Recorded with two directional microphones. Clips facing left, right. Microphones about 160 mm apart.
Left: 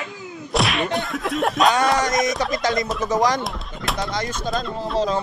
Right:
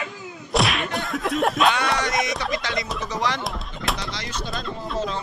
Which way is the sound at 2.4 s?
45° left (ahead or behind).